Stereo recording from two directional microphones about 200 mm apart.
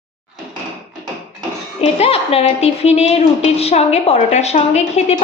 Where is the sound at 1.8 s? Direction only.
30° left (ahead or behind).